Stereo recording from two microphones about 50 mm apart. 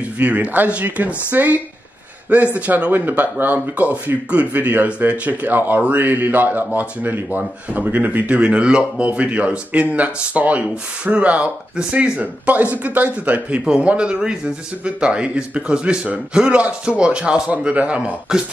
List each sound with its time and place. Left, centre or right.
0.2 s speech: right
2.9 s speech: right
13.7 s speech: right